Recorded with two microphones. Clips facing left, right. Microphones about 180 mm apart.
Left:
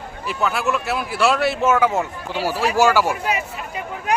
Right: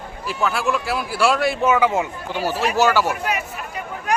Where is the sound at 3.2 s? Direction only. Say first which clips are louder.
Left 1 dB; 25° left (ahead or behind).